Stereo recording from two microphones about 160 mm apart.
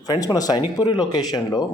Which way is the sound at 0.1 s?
25° left (ahead or behind).